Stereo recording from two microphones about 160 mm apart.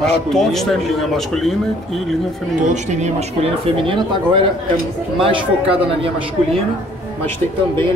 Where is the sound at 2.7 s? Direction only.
45° right (ahead or behind).